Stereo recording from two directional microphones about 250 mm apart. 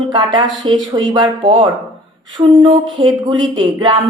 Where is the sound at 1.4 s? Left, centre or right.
Right.